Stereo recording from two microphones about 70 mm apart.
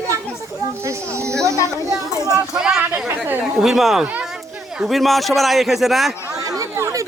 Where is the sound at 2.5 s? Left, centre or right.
Centre.